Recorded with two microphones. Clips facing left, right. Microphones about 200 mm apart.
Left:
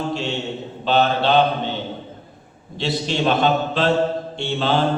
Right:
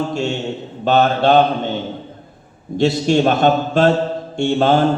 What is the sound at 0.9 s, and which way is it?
Speech, 45° right (ahead or behind).